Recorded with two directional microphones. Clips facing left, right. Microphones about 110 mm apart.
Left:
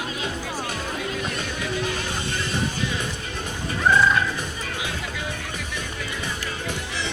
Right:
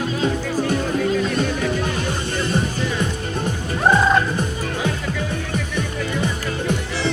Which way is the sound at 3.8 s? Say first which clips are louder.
Right 3 dB; 40° right (ahead or behind).